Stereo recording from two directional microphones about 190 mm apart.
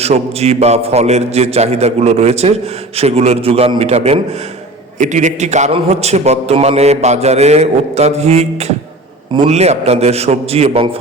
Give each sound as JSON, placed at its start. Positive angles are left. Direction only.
{"t": 0.0, "sound": "a man's voice", "side_deg": -35}